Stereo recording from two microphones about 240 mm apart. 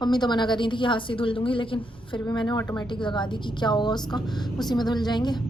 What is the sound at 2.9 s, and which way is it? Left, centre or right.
A woman's voice, centre.